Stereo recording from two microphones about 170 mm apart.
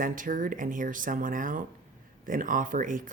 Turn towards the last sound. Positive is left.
turn(degrees=-50)  # may be behind; listen again after turning